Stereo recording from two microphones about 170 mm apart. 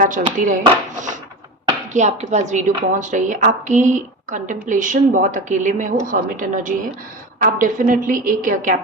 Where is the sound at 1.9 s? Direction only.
45° right (ahead or behind).